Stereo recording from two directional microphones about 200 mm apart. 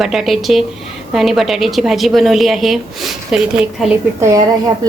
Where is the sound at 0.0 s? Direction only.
Centre (ahead or behind).